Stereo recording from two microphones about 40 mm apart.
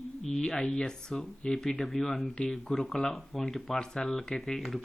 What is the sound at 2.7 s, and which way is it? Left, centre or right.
Speech, centre.